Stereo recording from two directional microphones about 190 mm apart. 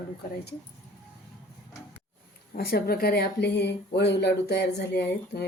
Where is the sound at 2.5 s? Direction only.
55° left (ahead or behind).